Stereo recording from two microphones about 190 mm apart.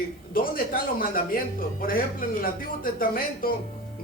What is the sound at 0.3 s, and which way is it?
A man's voice, 50° left (ahead or behind).